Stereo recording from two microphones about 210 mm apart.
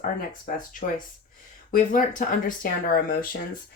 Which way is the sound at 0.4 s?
40° left (ahead or behind).